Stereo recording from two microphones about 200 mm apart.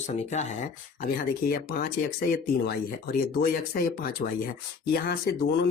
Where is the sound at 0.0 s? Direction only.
35° left (ahead or behind).